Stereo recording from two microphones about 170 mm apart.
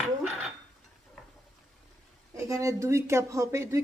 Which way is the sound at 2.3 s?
15° right (ahead or behind).